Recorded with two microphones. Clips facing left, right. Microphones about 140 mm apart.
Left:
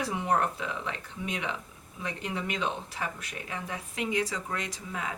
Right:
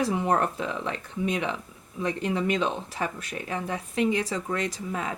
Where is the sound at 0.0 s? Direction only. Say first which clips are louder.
Right 4 dB; 35° right (ahead or behind).